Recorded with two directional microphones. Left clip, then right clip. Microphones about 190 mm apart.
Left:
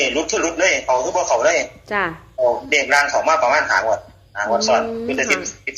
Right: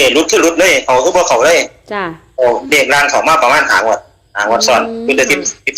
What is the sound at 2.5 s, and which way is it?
A man's voice, 50° right (ahead or behind).